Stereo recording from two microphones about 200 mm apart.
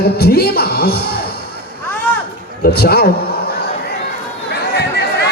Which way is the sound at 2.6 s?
50° left (ahead or behind).